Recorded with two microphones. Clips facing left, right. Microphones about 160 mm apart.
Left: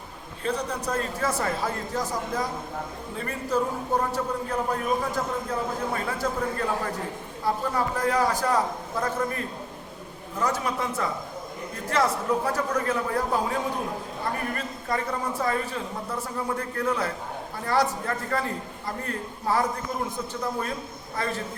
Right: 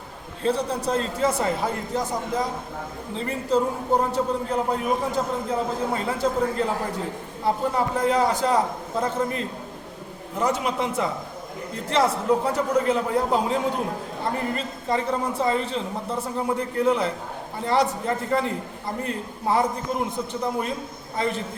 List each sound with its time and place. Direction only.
0.4 s a man's voice: 30° right (ahead or behind)